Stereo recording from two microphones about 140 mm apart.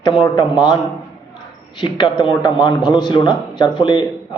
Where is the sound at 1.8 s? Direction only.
35° left (ahead or behind).